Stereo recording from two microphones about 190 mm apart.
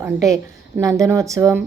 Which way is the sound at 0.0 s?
20° right (ahead or behind).